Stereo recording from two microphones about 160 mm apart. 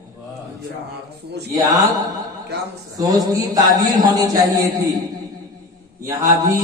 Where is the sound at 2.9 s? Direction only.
20° right (ahead or behind).